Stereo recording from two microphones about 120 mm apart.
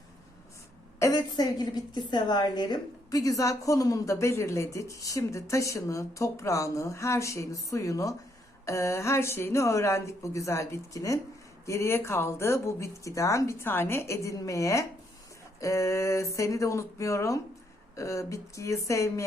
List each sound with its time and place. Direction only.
1.1 s a woman's voice: 35° left (ahead or behind)